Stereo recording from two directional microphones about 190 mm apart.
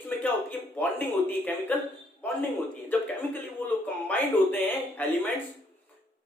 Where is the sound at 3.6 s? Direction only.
10° left (ahead or behind).